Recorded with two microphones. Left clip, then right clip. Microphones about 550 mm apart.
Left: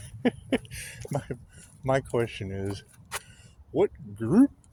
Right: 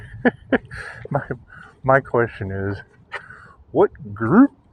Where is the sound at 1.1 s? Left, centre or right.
Left.